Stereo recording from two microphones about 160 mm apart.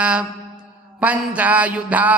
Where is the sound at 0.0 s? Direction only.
5° right (ahead or behind).